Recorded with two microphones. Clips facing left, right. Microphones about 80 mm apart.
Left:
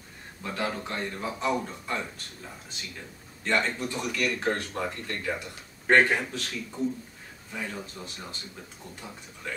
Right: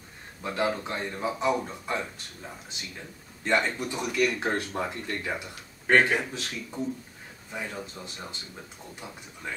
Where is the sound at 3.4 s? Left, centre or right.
Centre.